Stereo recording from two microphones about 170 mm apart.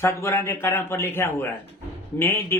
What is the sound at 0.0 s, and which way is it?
Speech, 15° left (ahead or behind).